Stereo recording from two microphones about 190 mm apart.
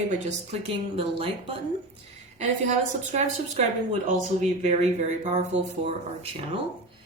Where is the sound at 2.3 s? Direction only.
35° right (ahead or behind).